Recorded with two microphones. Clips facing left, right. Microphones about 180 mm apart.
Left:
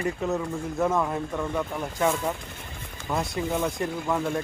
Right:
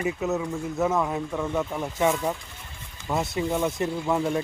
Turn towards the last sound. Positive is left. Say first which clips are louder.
# right 2 dB
turn(degrees=-5)  # may be behind; listen again after turning